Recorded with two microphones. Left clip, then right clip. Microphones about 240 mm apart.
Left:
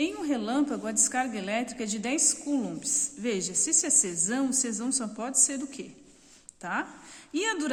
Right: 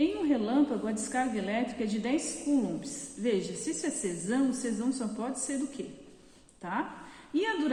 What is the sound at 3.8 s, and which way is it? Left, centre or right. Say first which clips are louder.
A woman's voice: left 6 dB; left.